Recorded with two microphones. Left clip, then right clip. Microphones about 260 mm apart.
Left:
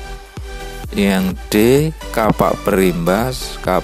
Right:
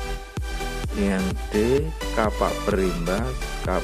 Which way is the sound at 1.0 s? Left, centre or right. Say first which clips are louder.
Left 8 dB; left.